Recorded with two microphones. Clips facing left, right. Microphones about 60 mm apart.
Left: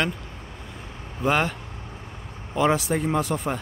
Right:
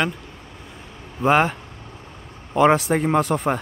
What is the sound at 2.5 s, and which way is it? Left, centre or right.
Speech, right.